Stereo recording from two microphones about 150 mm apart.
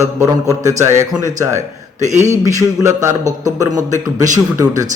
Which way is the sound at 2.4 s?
20° right (ahead or behind).